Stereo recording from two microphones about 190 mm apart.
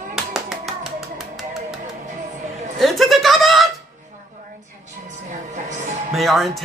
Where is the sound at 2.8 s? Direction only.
Centre (ahead or behind).